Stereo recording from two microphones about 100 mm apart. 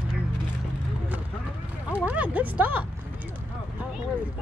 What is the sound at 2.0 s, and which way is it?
Speech, 15° right (ahead or behind).